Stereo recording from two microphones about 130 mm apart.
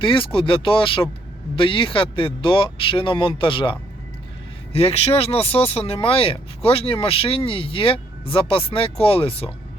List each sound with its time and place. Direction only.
0.0 s speech: 40° left (ahead or behind)